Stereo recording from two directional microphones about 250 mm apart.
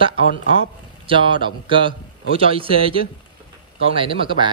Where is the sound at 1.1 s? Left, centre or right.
Centre.